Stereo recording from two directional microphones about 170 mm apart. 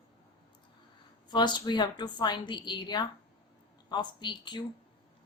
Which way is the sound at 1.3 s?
25° left (ahead or behind).